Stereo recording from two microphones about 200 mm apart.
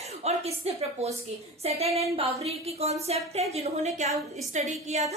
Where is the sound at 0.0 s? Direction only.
30° right (ahead or behind).